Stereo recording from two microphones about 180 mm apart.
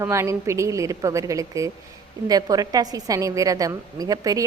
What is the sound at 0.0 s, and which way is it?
A woman's voice, 15° right (ahead or behind).